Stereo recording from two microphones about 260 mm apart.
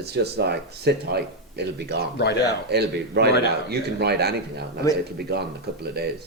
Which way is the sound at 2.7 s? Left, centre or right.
Right.